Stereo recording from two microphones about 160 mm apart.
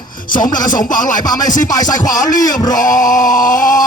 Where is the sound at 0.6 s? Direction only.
25° left (ahead or behind).